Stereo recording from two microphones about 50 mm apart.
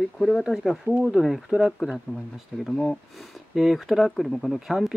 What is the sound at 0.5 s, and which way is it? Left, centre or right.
Speech, centre.